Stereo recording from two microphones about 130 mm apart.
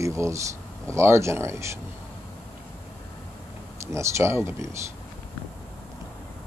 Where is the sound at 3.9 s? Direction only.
20° right (ahead or behind).